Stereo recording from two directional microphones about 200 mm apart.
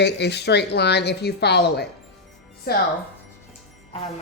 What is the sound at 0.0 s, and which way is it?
A woman's voice, 55° left (ahead or behind).